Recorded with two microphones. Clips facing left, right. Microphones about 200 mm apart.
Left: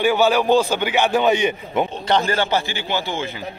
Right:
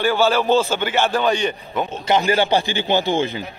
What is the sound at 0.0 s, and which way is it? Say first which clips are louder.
Speech: left 1 dB; 15° left (ahead or behind).